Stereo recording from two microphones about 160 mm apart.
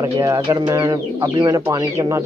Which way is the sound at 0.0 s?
20° right (ahead or behind).